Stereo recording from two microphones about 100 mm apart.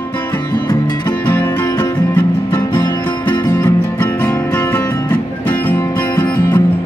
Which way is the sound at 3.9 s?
20° left (ahead or behind).